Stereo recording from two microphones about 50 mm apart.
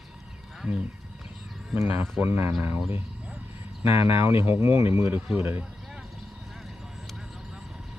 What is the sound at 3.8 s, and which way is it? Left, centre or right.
Speech, right.